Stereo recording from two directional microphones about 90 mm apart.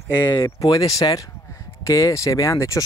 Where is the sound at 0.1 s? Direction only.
55° left (ahead or behind).